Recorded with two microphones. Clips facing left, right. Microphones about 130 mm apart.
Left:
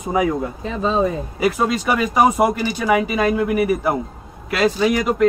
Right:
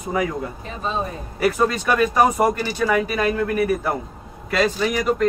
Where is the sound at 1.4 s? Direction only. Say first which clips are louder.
Even; 10° left (ahead or behind).